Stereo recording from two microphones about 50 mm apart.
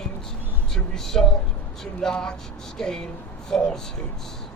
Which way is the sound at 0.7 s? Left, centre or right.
Centre.